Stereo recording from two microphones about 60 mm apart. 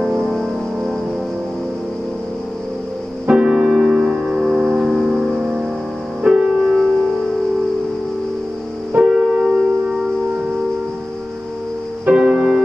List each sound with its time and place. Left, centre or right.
0.0 s music: centre
3.3 s music: centre
8.9 s music: centre
12.1 s music: centre